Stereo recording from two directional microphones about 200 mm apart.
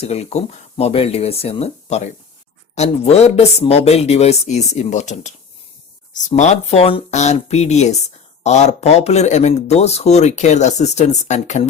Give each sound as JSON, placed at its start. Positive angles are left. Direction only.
{"t": 0.0, "sound": "speech", "side_deg": 30}